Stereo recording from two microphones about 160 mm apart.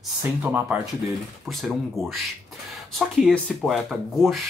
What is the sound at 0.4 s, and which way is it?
Speech, 10° right (ahead or behind).